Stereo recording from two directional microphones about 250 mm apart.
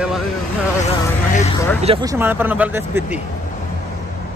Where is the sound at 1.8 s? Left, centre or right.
Centre.